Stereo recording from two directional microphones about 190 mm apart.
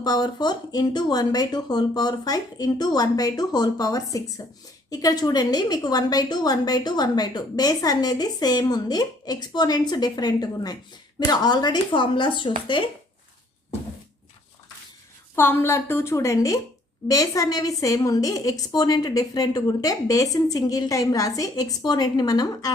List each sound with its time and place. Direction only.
0.0 s a woman's voice: 20° left (ahead or behind)
15.4 s a woman's voice: 10° left (ahead or behind)